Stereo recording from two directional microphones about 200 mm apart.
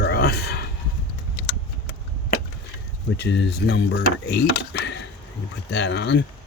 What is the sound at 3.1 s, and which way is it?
Speech, 60° left (ahead or behind).